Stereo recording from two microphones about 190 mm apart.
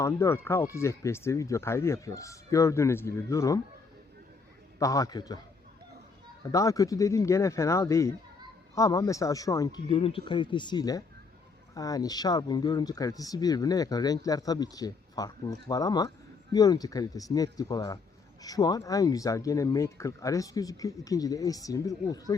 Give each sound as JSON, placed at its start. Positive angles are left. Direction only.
{"t": 0.0, "sound": "speech", "side_deg": 15}
{"t": 4.8, "sound": "speech", "side_deg": 15}
{"t": 6.4, "sound": "speech", "side_deg": 15}